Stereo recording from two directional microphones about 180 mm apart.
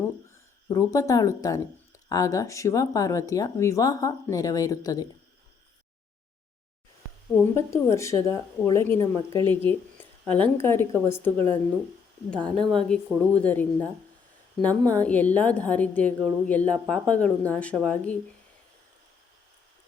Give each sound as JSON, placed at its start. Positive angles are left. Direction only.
{"t": 0.7, "sound": "speech", "side_deg": 15}
{"t": 7.3, "sound": "speech", "side_deg": 15}
{"t": 10.2, "sound": "speech", "side_deg": -30}
{"t": 10.6, "sound": "speech", "side_deg": 10}
{"t": 12.5, "sound": "a woman's voice", "side_deg": 5}